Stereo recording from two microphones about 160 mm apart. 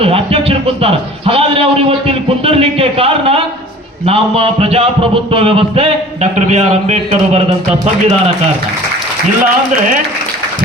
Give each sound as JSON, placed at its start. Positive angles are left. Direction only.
{"t": 0.0, "sound": "a man's voice", "side_deg": -35}